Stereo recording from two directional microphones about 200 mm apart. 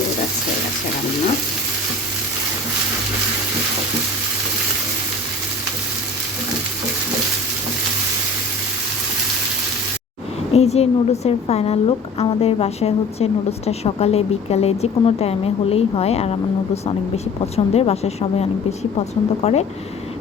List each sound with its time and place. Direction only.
10.5 s a woman's voice: 30° left (ahead or behind)
17.4 s a woman's voice: 30° left (ahead or behind)